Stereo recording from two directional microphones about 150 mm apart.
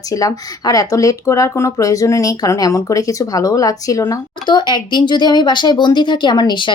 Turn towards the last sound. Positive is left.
turn(degrees=30)  # may be behind; listen again after turning